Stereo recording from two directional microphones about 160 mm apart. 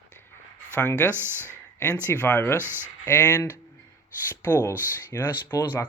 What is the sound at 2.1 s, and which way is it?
Speech, 15° left (ahead or behind).